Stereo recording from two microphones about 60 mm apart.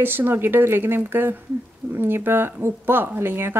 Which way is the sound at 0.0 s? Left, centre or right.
Right.